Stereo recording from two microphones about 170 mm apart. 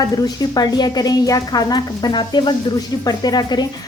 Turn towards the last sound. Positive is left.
turn(degrees=25)  # may be behind; listen again after turning